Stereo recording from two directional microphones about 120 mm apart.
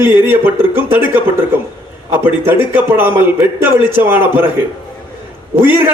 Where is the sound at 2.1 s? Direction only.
15° right (ahead or behind).